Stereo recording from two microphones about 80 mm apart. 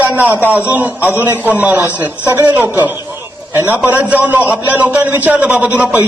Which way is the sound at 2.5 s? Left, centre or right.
Right.